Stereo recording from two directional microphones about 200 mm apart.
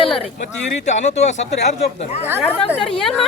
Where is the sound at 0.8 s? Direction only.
35° left (ahead or behind).